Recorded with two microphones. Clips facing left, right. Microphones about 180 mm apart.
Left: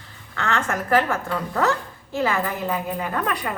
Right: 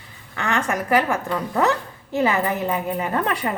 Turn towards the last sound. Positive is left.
turn(degrees=-25)  # may be behind; listen again after turning